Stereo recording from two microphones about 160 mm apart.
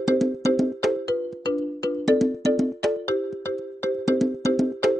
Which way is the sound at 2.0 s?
Centre (ahead or behind).